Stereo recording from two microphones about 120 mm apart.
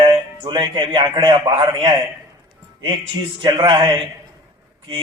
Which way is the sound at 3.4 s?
45° right (ahead or behind).